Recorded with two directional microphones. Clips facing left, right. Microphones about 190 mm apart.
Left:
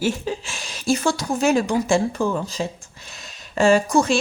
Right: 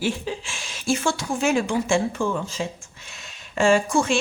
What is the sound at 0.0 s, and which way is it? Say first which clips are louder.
A woman's voice: left 3 dB; 40° left (ahead or behind).